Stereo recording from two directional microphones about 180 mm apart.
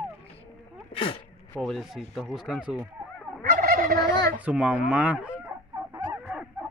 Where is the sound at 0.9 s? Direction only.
30° left (ahead or behind).